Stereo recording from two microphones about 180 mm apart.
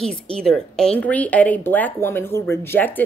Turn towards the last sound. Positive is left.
turn(degrees=10)  # may be behind; listen again after turning